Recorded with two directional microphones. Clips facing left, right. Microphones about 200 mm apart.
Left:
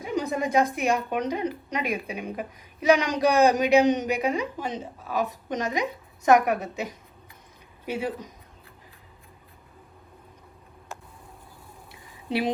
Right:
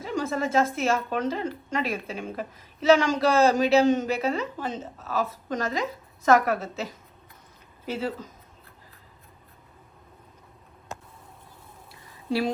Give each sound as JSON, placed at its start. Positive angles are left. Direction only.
{"t": 0.0, "sound": "speech", "side_deg": 15}